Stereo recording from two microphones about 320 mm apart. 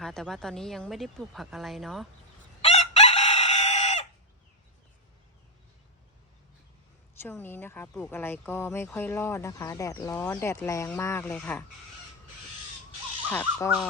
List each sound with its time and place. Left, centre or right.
0.0 s speech: centre
2.6 s chicken: centre
7.2 s speech: centre
13.2 s speech: centre